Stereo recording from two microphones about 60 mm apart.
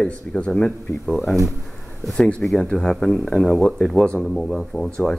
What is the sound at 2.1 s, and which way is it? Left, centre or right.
Speech, centre.